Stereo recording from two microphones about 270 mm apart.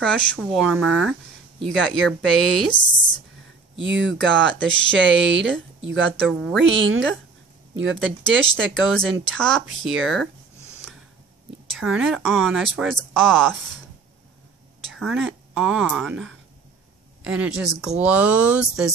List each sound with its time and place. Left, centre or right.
0.0 s speech: centre
3.8 s speech: right
6.2 s speech: centre
6.6 s speech: right
9.3 s speech: centre
11.7 s speech: centre
14.9 s a woman's voice: centre